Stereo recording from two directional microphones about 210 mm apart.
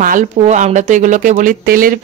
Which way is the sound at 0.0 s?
35° right (ahead or behind).